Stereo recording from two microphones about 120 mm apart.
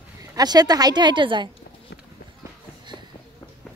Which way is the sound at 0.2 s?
30° right (ahead or behind).